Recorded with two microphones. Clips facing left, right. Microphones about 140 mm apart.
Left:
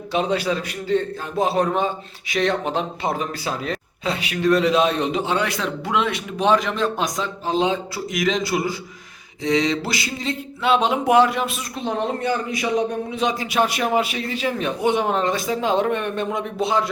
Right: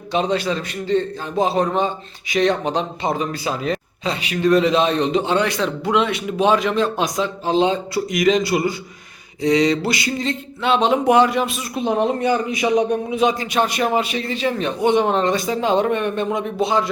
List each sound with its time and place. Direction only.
0.1 s a man's voice: 5° left (ahead or behind)
11.8 s a man's voice: 15° right (ahead or behind)
13.1 s a man's voice: centre (ahead or behind)